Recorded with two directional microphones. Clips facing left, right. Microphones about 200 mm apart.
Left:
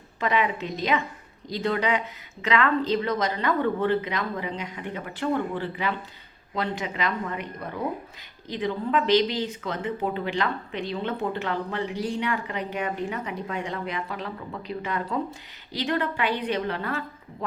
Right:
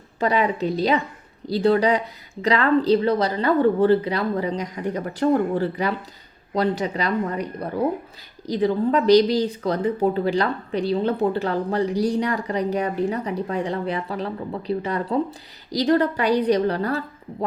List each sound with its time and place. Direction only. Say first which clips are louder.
0.2 s speech: right 4 dB; 35° right (ahead or behind)